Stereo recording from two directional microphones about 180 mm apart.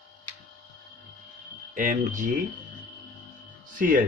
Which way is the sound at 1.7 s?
45° right (ahead or behind).